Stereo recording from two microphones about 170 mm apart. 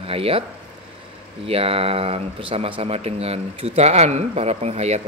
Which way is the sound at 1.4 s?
35° right (ahead or behind).